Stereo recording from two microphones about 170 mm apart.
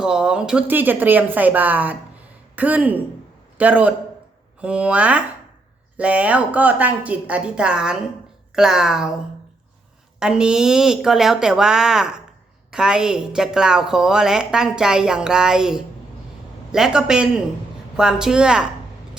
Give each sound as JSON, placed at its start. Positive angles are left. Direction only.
{"t": 0.0, "sound": "a woman's voice", "side_deg": -5}
{"t": 10.2, "sound": "a woman's voice", "side_deg": -5}